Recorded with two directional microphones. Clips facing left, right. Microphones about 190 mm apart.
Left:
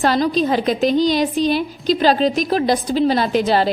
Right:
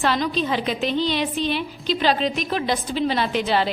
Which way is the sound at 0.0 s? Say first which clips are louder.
Left 5 dB; 40° left (ahead or behind).